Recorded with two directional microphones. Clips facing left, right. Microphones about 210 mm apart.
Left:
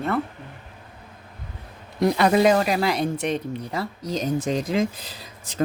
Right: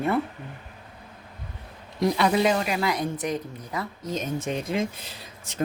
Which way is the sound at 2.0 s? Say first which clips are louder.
Left 4 dB; 55° left (ahead or behind).